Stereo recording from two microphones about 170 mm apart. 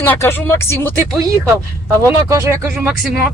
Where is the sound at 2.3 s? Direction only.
20° right (ahead or behind).